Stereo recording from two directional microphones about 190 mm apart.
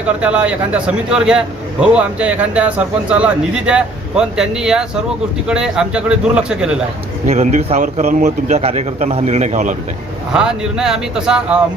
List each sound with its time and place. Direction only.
0.2 s a man's voice: 5° right (ahead or behind)
7.3 s a man's voice: 35° right (ahead or behind)
10.3 s a man's voice: 5° right (ahead or behind)